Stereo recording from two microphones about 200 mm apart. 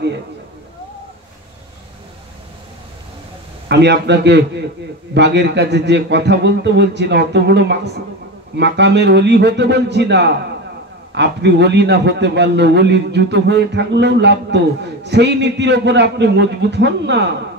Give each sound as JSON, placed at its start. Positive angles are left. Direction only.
{"t": 3.6, "sound": "a man's voice", "side_deg": -60}